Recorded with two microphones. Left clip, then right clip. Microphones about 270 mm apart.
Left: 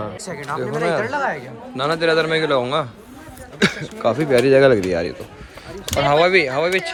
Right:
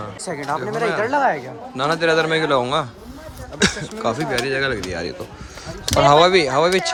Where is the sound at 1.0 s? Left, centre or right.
Right.